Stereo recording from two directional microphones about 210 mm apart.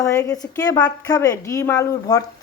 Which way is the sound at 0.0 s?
15° left (ahead or behind).